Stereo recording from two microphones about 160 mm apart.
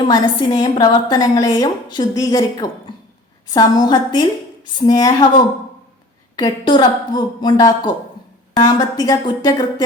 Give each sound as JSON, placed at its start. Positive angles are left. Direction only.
{"t": 0.1, "sound": "a woman's voice", "side_deg": 25}
{"t": 6.3, "sound": "a woman's voice", "side_deg": 25}